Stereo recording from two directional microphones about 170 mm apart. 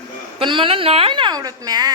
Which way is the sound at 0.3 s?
30° right (ahead or behind).